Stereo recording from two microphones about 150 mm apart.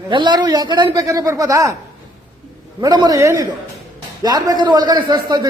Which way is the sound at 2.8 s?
25° right (ahead or behind).